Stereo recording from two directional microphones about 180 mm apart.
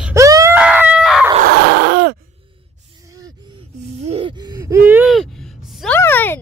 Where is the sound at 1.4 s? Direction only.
60° right (ahead or behind).